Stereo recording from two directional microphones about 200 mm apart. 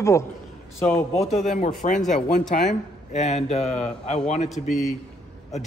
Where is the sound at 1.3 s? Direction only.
35° left (ahead or behind).